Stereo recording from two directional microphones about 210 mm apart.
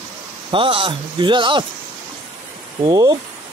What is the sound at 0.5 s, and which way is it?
Speech, 25° right (ahead or behind).